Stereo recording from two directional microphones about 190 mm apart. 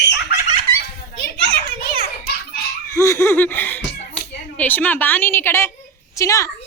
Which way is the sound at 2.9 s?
15° left (ahead or behind).